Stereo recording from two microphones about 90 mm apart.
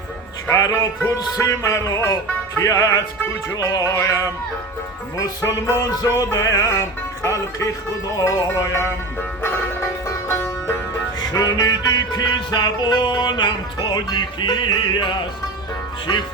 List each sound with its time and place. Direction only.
0.5 s music: 35° left (ahead or behind)
3.5 s music: 40° left (ahead or behind)
10.1 s music: 25° left (ahead or behind)
11.2 s music: 50° left (ahead or behind)